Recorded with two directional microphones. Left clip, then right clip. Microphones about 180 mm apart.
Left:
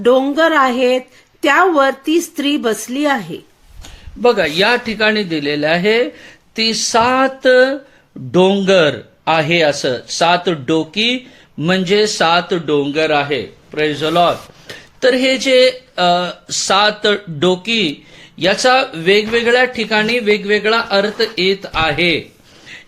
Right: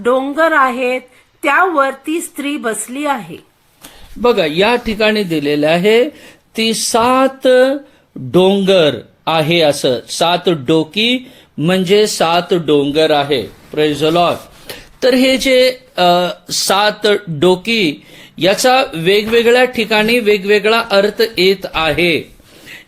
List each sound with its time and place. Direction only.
0.0 s speech: 35° left (ahead or behind)
3.8 s a man's voice: 30° right (ahead or behind)